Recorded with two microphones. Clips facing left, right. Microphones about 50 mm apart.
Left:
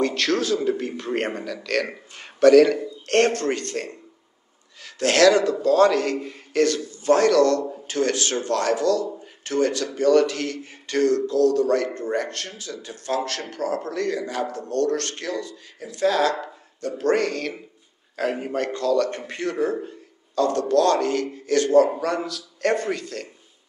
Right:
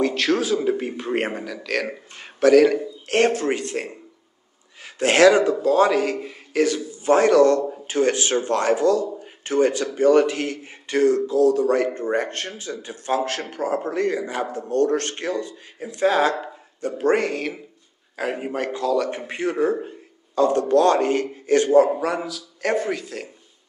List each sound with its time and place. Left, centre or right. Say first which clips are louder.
0.0 s a man's voice: right 1 dB; centre; by 21.6 s right
21.6 s speech: left 1 dB; centre